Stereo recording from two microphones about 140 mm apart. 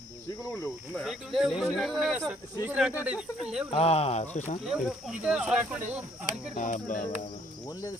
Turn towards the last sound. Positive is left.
turn(degrees=65)  # may be behind; listen again after turning